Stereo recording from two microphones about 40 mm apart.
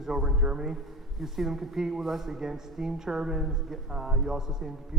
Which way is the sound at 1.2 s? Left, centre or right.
Centre.